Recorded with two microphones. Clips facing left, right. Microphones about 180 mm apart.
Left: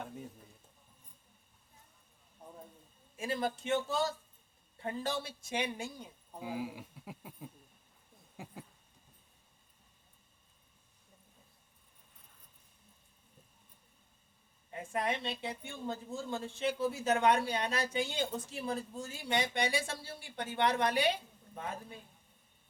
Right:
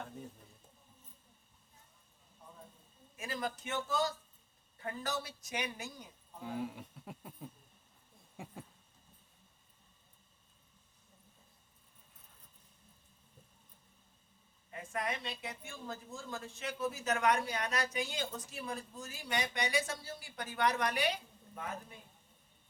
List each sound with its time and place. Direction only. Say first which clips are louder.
3.2 s speech: left 5 dB; 30° left (ahead or behind)
6.4 s speech: left 1 dB; 5° left (ahead or behind)
8.4 s a sound: even; centre (ahead or behind)
14.7 s speech: left 4 dB; 30° left (ahead or behind)